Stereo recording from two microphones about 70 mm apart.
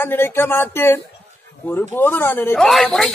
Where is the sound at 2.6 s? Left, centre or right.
Centre.